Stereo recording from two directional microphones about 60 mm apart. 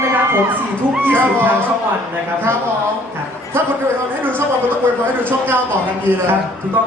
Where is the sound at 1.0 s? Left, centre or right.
Right.